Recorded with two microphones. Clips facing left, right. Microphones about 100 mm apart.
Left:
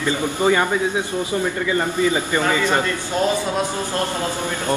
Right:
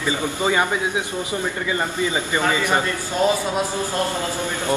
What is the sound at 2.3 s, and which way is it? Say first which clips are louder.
Speech: left 1 dB; 15° right (ahead or behind).